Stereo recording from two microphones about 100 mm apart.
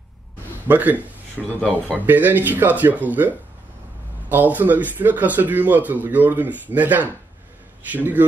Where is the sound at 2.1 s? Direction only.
20° right (ahead or behind).